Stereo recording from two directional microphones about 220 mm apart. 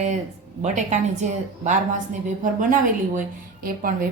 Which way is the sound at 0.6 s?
30° right (ahead or behind).